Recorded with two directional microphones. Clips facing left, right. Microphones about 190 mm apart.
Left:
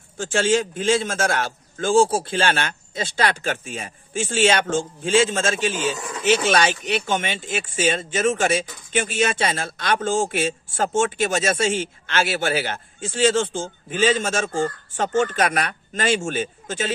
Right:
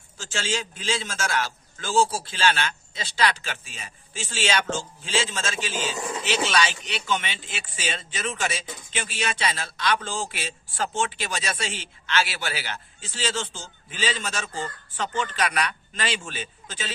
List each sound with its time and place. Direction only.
0.2 s speech: 55° left (ahead or behind)
5.9 s a sound: 25° right (ahead or behind)
6.2 s speech: 50° left (ahead or behind)